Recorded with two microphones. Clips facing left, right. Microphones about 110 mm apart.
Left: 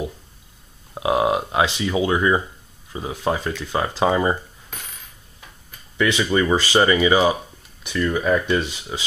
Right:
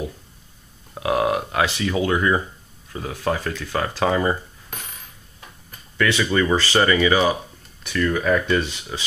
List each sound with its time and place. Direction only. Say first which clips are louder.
0.9 s speech: left 1 dB; 20° left (ahead or behind)
5.9 s speech: left 1 dB; 15° left (ahead or behind)